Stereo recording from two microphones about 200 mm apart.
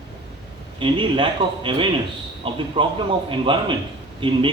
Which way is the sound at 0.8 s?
25° right (ahead or behind).